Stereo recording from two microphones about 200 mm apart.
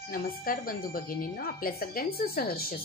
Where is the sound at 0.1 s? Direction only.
45° left (ahead or behind).